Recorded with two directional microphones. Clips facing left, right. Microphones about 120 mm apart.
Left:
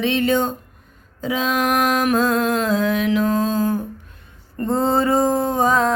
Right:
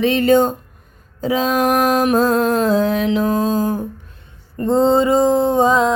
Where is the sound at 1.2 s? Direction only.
40° right (ahead or behind).